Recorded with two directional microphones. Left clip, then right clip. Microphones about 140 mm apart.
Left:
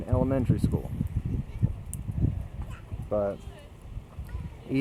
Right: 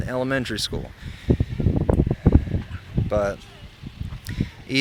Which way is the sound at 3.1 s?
45° right (ahead or behind).